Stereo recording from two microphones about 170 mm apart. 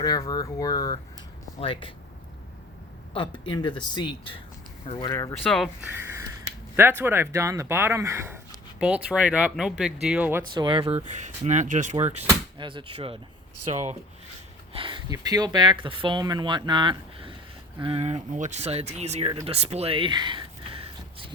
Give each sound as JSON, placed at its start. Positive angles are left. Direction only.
{"t": 0.0, "sound": "speech", "side_deg": 25}
{"t": 3.1, "sound": "speech", "side_deg": 30}
{"t": 5.5, "sound": "speech", "side_deg": 0}
{"t": 5.8, "sound": "speech", "side_deg": -15}
{"t": 10.5, "sound": "speech", "side_deg": -25}
{"t": 11.1, "sound": "speech", "side_deg": -45}
{"t": 12.5, "sound": "speech", "side_deg": -30}
{"t": 14.7, "sound": "speech", "side_deg": -30}
{"t": 19.5, "sound": "a sound", "side_deg": -35}